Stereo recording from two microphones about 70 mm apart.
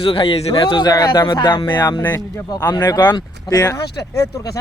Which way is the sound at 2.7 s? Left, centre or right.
Left.